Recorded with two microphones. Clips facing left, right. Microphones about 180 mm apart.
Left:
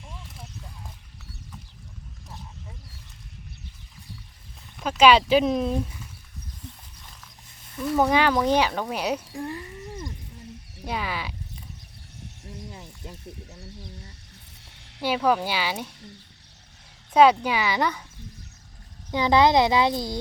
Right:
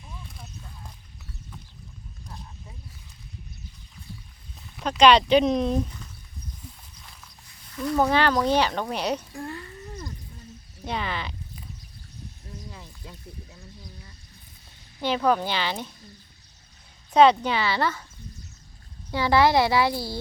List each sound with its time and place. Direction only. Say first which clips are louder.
4.8 s speech: even; 5° left (ahead or behind)
7.8 s speech: left 1 dB; 5° left (ahead or behind)
9.3 s a sound: left 2 dB; 20° left (ahead or behind)
10.8 s speech: even; 5° left (ahead or behind)
14.6 s a sound: left 2 dB; 80° left
15.0 s speech: even; 10° left (ahead or behind)
17.4 s speech: even; 10° left (ahead or behind)
19.1 s speech: left 1 dB; 20° left (ahead or behind)